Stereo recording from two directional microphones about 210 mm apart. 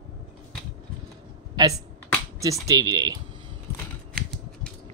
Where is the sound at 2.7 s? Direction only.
20° right (ahead or behind).